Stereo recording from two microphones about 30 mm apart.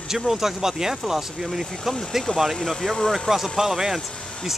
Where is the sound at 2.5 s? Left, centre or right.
Centre.